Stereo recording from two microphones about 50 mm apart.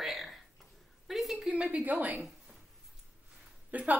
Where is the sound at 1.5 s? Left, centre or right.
Right.